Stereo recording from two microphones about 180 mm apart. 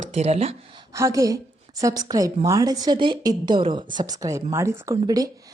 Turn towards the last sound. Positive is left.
turn(degrees=-20)  # may be behind; listen again after turning